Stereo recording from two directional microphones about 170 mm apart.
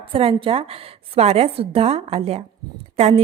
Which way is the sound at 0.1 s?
35° right (ahead or behind).